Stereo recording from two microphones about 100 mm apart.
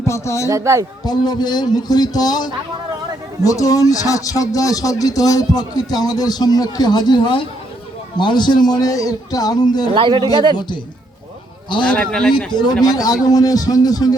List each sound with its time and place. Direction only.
0.0 s speech: 30° left (ahead or behind)
0.4 s speech: 30° right (ahead or behind)
1.0 s a man's voice: 45° left (ahead or behind)
9.9 s speech: 50° right (ahead or behind)
11.9 s speech: 10° left (ahead or behind)
12.5 s a man's voice: 50° left (ahead or behind)